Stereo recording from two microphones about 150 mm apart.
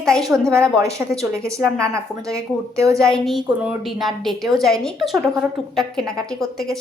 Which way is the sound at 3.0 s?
Centre (ahead or behind).